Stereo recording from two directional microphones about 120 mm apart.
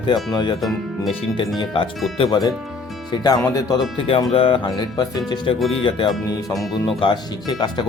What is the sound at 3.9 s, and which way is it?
Speech, 50° left (ahead or behind).